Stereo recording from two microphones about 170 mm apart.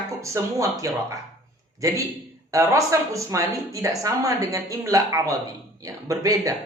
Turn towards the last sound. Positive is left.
turn(degrees=-20)  # may be behind; listen again after turning